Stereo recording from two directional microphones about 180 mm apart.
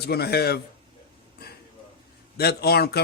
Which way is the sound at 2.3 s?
60° left (ahead or behind).